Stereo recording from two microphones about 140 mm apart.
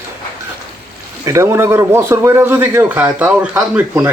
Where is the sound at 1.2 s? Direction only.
20° right (ahead or behind).